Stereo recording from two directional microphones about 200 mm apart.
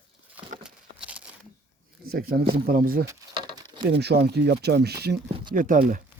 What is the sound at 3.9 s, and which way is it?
Speech, 55° right (ahead or behind).